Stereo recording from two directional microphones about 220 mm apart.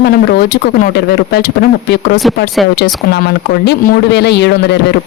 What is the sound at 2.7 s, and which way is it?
Speech, 50° left (ahead or behind).